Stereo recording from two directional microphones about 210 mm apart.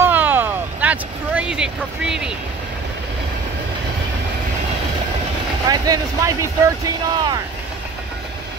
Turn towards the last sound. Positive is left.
turn(degrees=-20)  # may be behind; listen again after turning